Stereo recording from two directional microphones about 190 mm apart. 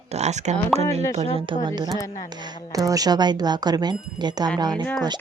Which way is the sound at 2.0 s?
15° left (ahead or behind).